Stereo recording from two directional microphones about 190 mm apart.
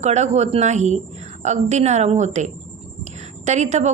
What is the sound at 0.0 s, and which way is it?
A woman's voice, 35° right (ahead or behind).